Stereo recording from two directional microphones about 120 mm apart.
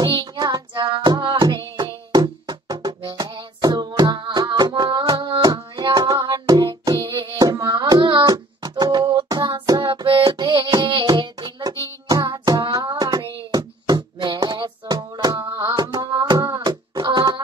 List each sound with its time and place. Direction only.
0.0 s music: 35° right (ahead or behind)
7.3 s carnatic music: 30° right (ahead or behind)
7.6 s a sound: 40° right (ahead or behind)
12.1 s music: 30° right (ahead or behind)